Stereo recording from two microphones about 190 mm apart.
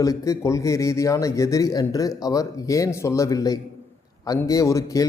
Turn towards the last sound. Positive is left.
turn(degrees=15)  # may be behind; listen again after turning